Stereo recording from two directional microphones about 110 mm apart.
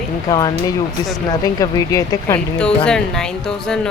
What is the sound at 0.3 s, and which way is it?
Speech, 35° left (ahead or behind).